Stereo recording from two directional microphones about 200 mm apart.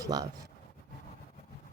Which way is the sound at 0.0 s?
20° right (ahead or behind).